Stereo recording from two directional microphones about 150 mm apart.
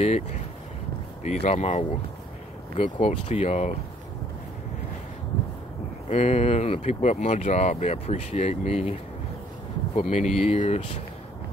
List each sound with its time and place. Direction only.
1.2 s speech: 50° left (ahead or behind)
6.0 s speech: 45° left (ahead or behind)
9.9 s speech: 45° left (ahead or behind)